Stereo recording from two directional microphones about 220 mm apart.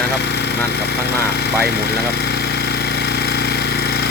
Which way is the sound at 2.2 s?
45° left (ahead or behind).